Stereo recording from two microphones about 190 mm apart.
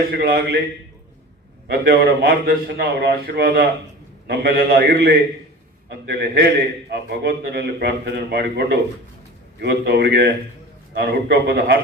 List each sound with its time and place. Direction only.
0.1 s a man's voice: 55° right (ahead or behind)
1.6 s a man's voice: 55° right (ahead or behind)